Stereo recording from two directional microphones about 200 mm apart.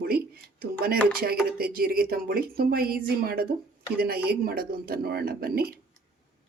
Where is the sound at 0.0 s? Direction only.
50° right (ahead or behind).